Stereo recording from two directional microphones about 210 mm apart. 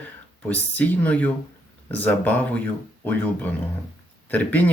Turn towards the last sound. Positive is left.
turn(degrees=10)  # may be behind; listen again after turning